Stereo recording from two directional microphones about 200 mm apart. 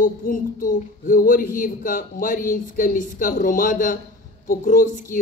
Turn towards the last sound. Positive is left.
turn(degrees=45)  # may be behind; listen again after turning